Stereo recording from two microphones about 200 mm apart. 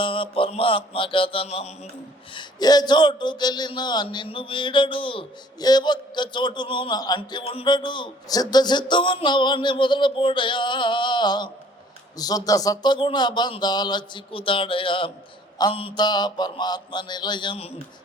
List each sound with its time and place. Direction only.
0.0 s a man's voice: 25° left (ahead or behind)
2.3 s a man's voice: 20° left (ahead or behind)